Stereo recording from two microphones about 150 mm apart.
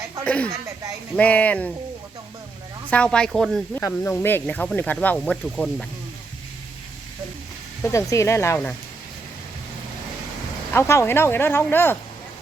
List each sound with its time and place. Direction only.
0.3 s speech: 10° left (ahead or behind)
2.9 s speech: 5° left (ahead or behind)
3.8 s speech: 15° left (ahead or behind)
7.8 s speech: 20° left (ahead or behind)
10.8 s speech: 15° left (ahead or behind)